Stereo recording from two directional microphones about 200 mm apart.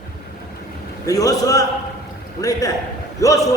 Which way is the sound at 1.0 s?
15° left (ahead or behind).